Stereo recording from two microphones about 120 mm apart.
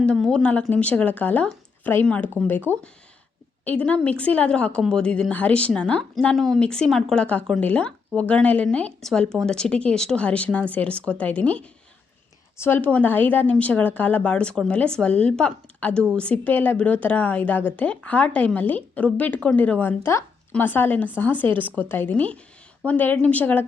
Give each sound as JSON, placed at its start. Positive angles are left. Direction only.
{"t": 0.0, "sound": "a woman's voice", "side_deg": 5}
{"t": 2.7, "sound": "speech", "side_deg": -20}
{"t": 3.6, "sound": "a woman's voice", "side_deg": 10}